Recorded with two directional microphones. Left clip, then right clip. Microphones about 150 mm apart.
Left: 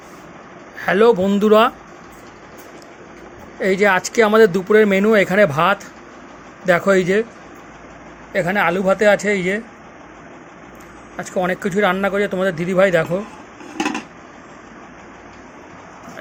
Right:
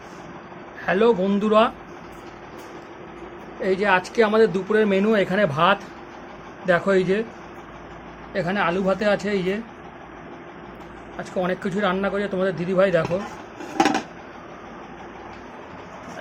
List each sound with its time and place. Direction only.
0.8 s speech: 45° left (ahead or behind)
3.6 s speech: 40° left (ahead or behind)
8.3 s speech: 35° left (ahead or behind)
11.2 s speech: 35° left (ahead or behind)